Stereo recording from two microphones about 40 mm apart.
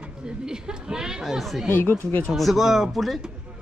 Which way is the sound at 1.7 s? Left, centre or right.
Left.